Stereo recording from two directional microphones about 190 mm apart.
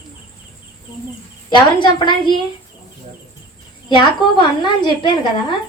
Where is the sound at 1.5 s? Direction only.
25° left (ahead or behind).